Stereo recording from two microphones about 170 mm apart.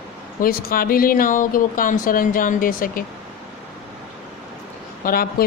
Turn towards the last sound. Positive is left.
turn(degrees=60)  # may be behind; listen again after turning